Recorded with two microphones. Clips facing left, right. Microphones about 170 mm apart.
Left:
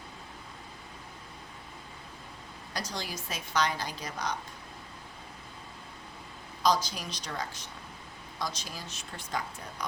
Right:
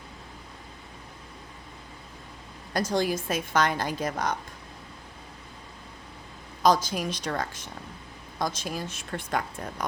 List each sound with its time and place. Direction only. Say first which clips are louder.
2.7 s a woman's voice: right 12 dB; 50° right (ahead or behind)
6.6 s a woman's voice: right 5 dB; 50° right (ahead or behind)